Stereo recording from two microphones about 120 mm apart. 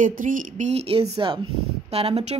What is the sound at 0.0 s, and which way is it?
Speech, 90° right.